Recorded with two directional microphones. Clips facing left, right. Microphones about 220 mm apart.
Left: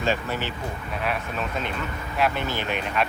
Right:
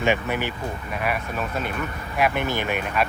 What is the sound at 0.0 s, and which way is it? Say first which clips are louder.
Speech: right 3 dB; 15° right (ahead or behind).